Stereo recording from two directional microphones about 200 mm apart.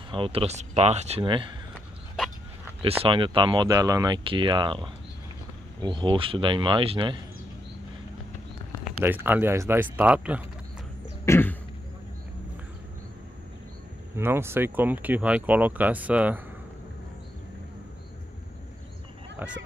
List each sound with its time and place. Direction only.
0.1 s speech: 25° right (ahead or behind)
3.0 s speech: 25° right (ahead or behind)
9.0 s speech: 10° right (ahead or behind)
11.2 s throat clearing: 10° left (ahead or behind)
14.1 s speech: 10° right (ahead or behind)